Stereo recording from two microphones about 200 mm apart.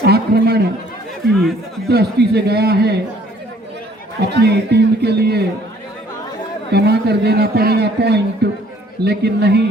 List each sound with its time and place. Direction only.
0.0 s a sound: 55° right (ahead or behind)
1.9 s a man's voice: 55° right (ahead or behind)
4.2 s a man's voice: 55° right (ahead or behind)
6.7 s a man's voice: 55° right (ahead or behind)